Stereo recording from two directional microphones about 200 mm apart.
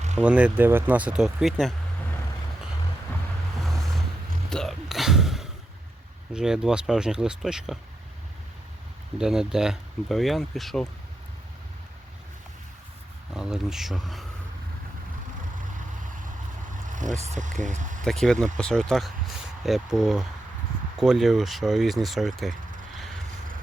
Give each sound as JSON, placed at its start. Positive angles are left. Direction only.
{"t": 0.2, "sound": "speech", "side_deg": -5}
{"t": 3.6, "sound": "vehicle", "side_deg": 0}
{"t": 4.4, "sound": "a sound", "side_deg": 0}
{"t": 6.3, "sound": "speech", "side_deg": -5}
{"t": 9.1, "sound": "speech", "side_deg": -5}
{"t": 13.3, "sound": "speech", "side_deg": 0}
{"t": 16.9, "sound": "speech", "side_deg": -40}
{"t": 18.0, "sound": "speech", "side_deg": 5}